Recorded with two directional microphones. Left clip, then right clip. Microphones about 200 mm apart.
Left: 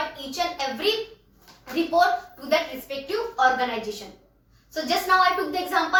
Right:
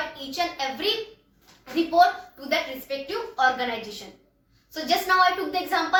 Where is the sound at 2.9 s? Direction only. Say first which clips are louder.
Right 2 dB; 10° right (ahead or behind).